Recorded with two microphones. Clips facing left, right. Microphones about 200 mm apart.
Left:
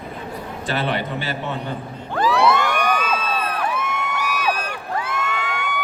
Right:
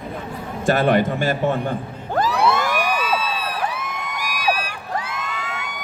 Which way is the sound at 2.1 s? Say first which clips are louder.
Left 1 dB; 40° right (ahead or behind).